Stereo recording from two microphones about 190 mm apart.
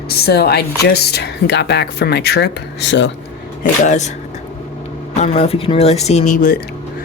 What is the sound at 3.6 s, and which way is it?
Speech, 40° left (ahead or behind).